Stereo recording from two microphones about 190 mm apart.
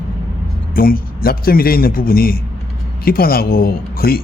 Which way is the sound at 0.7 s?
50° left (ahead or behind).